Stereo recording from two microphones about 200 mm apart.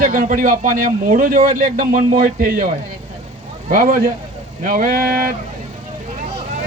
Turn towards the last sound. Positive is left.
turn(degrees=-45)  # may be behind; listen again after turning